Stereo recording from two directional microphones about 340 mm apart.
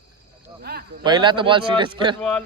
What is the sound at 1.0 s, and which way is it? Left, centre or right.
Speech, centre.